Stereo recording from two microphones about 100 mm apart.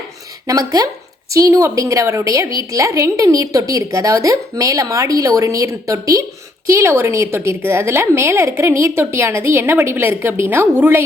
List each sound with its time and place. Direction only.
0.4 s a woman's voice: 35° right (ahead or behind); by 11.0 s 20° right (ahead or behind)